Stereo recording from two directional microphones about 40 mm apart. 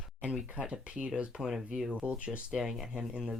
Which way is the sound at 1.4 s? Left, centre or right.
Centre.